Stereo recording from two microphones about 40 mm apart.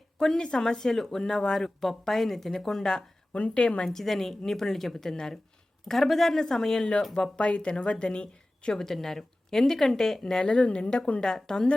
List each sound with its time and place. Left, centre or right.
0.2 s speech: centre
3.3 s a woman's voice: left
3.8 s speech: centre
7.3 s a woman's voice: left
8.7 s speech: centre
10.5 s a woman's voice: left
11.2 s speech: centre